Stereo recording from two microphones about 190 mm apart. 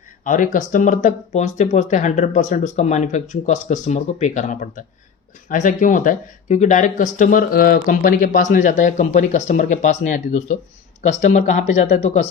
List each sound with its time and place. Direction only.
0.3 s speech: 45° left (ahead or behind)